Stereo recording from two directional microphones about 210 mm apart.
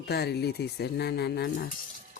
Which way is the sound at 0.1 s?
50° left (ahead or behind).